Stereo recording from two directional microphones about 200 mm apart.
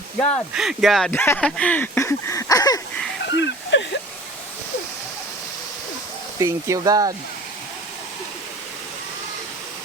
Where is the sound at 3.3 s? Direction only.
60° left (ahead or behind).